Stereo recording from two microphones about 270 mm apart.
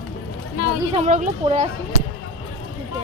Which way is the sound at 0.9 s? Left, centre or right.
Right.